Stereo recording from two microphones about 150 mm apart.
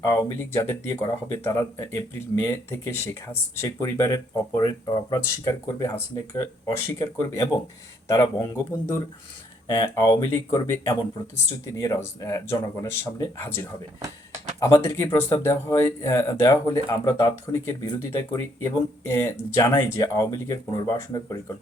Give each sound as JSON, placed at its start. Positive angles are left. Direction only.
{"t": 0.0, "sound": "speech", "side_deg": 20}
{"t": 9.6, "sound": "speech", "side_deg": 25}